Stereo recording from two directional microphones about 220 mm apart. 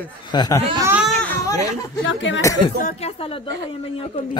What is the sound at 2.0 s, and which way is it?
Speech, 55° left (ahead or behind).